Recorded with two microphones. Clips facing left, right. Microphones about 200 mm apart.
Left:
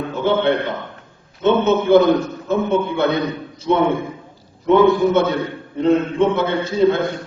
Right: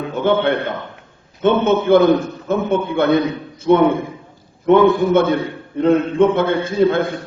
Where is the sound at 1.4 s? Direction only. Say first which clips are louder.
Right 1 dB; 50° right (ahead or behind).